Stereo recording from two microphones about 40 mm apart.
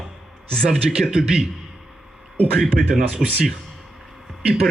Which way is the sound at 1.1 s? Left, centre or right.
Centre.